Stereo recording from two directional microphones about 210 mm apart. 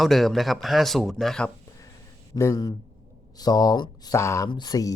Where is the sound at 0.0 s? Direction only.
Centre (ahead or behind).